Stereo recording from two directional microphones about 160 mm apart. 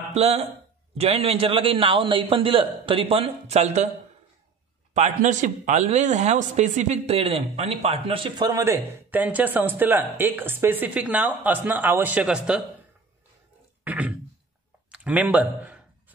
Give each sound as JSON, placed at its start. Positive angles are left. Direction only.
{"t": 0.1, "sound": "a man's voice", "side_deg": -40}
{"t": 4.9, "sound": "speech", "side_deg": -50}
{"t": 13.8, "sound": "a sound", "side_deg": -10}
{"t": 14.9, "sound": "speech", "side_deg": -10}